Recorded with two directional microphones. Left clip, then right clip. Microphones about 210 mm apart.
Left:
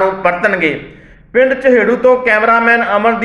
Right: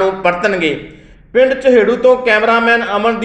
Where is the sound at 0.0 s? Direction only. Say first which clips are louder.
Left 1 dB; 30° right (ahead or behind).